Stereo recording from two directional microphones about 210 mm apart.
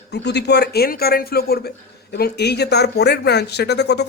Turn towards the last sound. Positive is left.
turn(degrees=55)  # may be behind; listen again after turning